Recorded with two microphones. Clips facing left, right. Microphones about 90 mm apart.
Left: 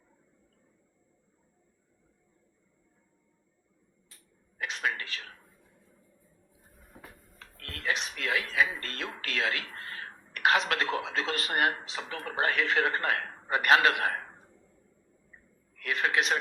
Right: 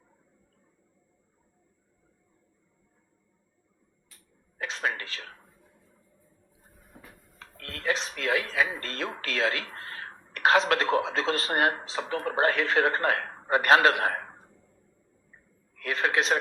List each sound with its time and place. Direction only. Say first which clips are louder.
4.5 s speech: right 2 dB; 35° right (ahead or behind)
7.3 s speech: right 4 dB; 35° right (ahead or behind)
15.7 s a sound: right 2 dB; 35° right (ahead or behind)